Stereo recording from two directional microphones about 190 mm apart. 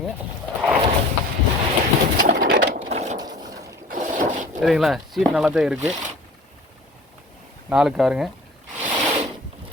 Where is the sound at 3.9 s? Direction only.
40° right (ahead or behind).